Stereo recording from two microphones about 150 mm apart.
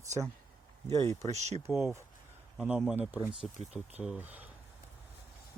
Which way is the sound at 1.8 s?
15° right (ahead or behind).